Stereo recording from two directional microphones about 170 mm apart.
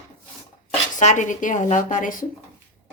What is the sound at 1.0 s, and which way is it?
Speech, 45° left (ahead or behind).